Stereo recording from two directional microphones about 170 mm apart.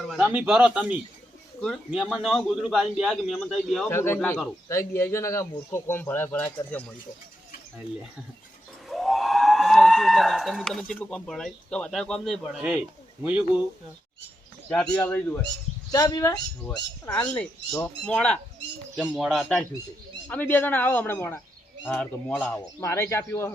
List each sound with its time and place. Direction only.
0.1 s a man's voice: 5° right (ahead or behind)
3.8 s speech: 15° left (ahead or behind)
8.9 s speech: centre (ahead or behind)
15.0 s speech: 10° left (ahead or behind)
15.9 s speech: 20° left (ahead or behind)
17.1 s a man's voice: 5° left (ahead or behind)